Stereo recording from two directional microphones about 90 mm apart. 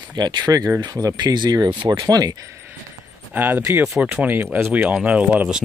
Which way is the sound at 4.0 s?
15° right (ahead or behind).